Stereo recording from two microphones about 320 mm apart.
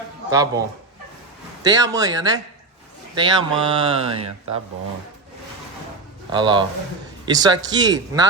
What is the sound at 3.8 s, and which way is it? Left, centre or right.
Speech, centre.